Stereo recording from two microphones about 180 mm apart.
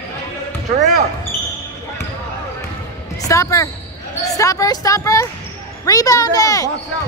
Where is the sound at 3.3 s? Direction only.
15° left (ahead or behind).